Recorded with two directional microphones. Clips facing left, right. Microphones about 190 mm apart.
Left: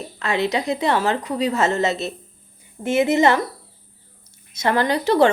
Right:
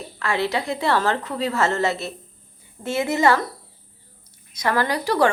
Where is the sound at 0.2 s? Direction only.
20° left (ahead or behind).